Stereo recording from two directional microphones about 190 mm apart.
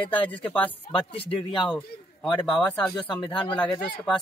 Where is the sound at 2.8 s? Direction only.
5° left (ahead or behind).